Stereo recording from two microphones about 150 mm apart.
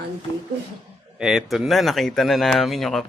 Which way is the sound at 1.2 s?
Centre (ahead or behind).